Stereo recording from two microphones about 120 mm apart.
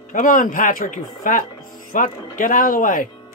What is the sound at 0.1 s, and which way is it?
Speech, 90° left.